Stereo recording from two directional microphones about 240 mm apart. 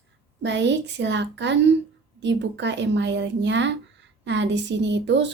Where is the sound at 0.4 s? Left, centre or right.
Right.